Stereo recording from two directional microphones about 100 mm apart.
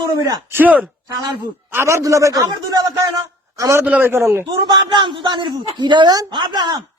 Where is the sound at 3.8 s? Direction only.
15° right (ahead or behind).